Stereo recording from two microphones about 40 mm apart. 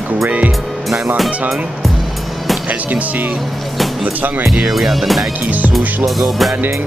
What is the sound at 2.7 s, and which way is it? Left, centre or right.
Speech, right.